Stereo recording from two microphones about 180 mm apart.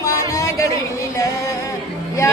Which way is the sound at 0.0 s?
15° left (ahead or behind).